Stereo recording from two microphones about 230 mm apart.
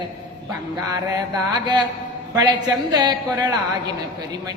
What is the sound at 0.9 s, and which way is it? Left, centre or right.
Speech, centre.